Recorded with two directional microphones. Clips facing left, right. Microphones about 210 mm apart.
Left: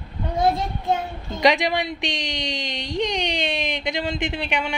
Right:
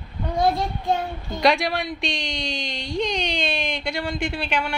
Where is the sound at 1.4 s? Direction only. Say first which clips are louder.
Left 1 dB; 15° left (ahead or behind).